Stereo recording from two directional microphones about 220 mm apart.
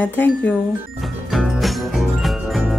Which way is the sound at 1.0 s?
Centre (ahead or behind).